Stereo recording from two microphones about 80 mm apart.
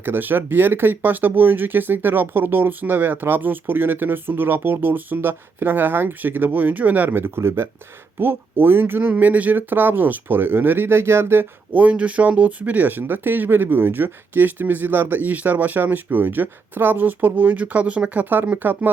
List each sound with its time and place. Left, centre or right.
0.0 s speech: right